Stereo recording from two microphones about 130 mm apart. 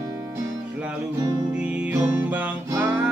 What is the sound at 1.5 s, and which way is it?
Music, 10° right (ahead or behind).